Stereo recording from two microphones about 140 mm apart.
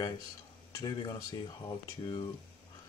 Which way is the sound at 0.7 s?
25° left (ahead or behind).